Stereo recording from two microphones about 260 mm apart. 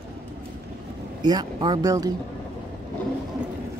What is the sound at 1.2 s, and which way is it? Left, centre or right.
Speech, centre.